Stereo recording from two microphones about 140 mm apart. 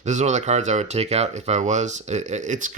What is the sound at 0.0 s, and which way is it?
Speech, 55° right (ahead or behind).